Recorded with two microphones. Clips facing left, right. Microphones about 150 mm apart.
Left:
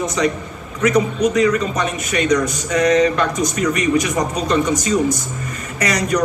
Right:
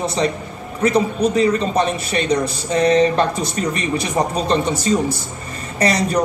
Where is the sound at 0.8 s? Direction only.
30° right (ahead or behind).